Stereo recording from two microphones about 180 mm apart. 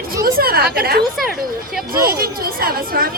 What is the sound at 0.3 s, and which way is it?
A woman's voice, 55° right (ahead or behind).